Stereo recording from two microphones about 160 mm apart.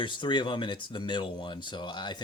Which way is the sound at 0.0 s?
30° left (ahead or behind).